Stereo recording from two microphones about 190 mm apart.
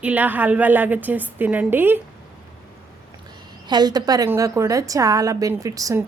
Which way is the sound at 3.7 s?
20° right (ahead or behind).